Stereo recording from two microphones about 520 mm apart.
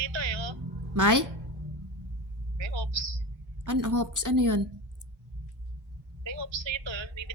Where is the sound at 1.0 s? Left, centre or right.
Right.